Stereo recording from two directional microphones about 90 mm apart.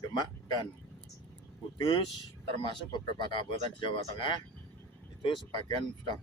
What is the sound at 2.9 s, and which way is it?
Speech, 65° left (ahead or behind).